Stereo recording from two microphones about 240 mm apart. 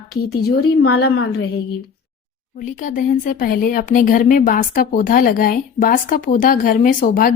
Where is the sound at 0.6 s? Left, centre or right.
Left.